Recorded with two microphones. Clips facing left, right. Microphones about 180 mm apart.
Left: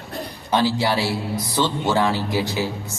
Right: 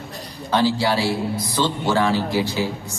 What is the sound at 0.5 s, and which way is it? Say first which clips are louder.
Speech: right 1 dB; 20° left (ahead or behind).